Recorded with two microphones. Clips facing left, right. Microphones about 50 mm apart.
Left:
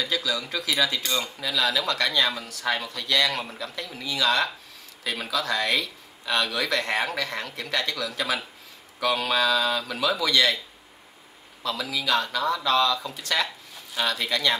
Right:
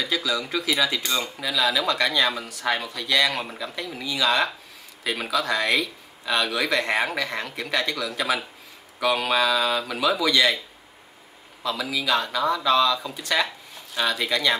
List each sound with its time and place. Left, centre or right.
0.0 s speech: centre
11.6 s speech: centre